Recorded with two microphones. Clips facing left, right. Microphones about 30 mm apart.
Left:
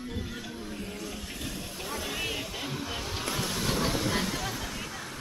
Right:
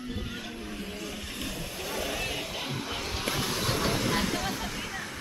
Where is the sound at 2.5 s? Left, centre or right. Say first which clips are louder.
Right 1 dB; centre.